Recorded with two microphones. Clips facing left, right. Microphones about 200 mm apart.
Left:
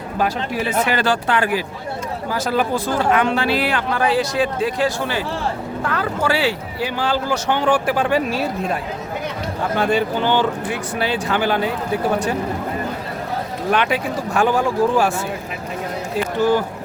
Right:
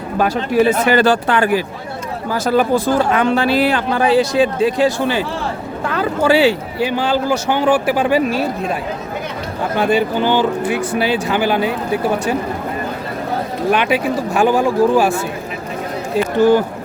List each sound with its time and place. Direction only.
0.2 s speech: 55° right (ahead or behind)
2.3 s speech: 45° right (ahead or behind); by 8.4 s 5° right (ahead or behind)
9.7 s speech: 5° right (ahead or behind)
13.7 s speech: 10° right (ahead or behind)
16.1 s speech: 20° right (ahead or behind)